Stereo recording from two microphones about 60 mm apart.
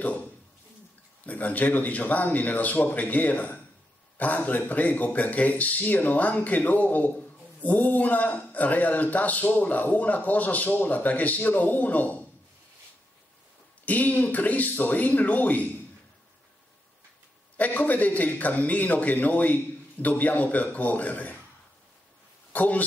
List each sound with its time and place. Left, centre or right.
0.0 s speech: left
13.8 s speech: left
17.6 s speech: left
22.5 s speech: left